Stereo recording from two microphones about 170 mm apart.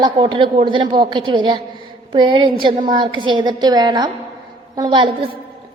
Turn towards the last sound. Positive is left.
turn(degrees=-25)  # may be behind; listen again after turning